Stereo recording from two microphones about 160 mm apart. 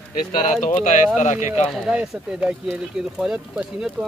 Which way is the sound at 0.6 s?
55° left (ahead or behind).